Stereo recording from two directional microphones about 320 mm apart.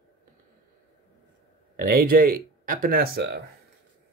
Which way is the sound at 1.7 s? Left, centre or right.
Right.